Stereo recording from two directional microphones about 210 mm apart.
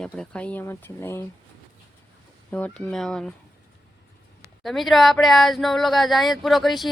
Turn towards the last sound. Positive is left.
turn(degrees=0)  # may be behind; listen again after turning